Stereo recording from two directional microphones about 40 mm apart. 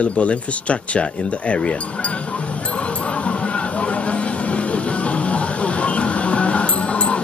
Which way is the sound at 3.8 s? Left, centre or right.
Left.